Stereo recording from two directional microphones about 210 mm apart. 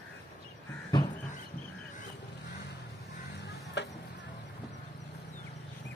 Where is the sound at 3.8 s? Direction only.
55° left (ahead or behind).